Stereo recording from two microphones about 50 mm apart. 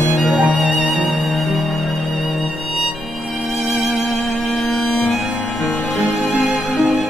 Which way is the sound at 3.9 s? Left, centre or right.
Centre.